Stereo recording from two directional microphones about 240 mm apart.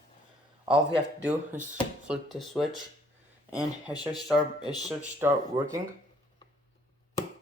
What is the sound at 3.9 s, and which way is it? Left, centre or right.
Speech, centre.